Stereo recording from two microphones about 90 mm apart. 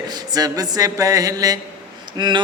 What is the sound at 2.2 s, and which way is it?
Speech, 60° right (ahead or behind).